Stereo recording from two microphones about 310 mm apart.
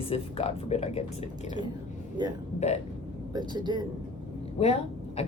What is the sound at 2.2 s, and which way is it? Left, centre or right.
Speech, centre.